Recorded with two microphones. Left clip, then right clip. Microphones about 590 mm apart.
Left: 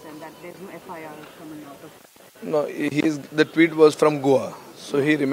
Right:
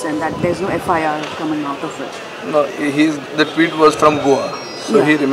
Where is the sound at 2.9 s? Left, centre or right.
Left.